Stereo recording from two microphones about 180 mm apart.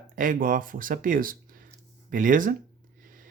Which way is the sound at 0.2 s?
50° right (ahead or behind).